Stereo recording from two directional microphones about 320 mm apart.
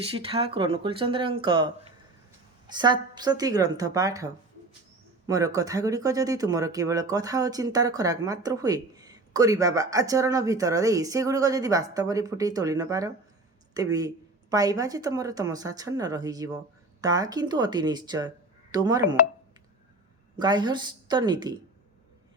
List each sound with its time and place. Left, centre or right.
0.0 s speech: centre
20.3 s speech: centre